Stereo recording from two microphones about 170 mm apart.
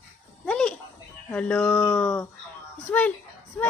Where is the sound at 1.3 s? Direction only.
5° left (ahead or behind).